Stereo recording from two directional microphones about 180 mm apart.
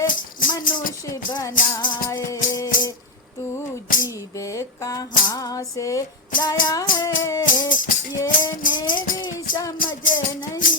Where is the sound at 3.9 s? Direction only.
50° left (ahead or behind).